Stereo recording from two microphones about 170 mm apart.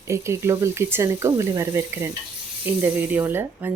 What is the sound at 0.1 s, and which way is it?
A woman's voice, 15° right (ahead or behind).